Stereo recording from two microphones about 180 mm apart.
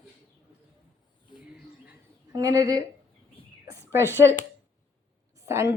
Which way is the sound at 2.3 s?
20° right (ahead or behind).